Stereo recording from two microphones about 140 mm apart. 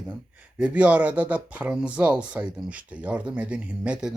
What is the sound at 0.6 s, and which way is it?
Speech, 10° right (ahead or behind).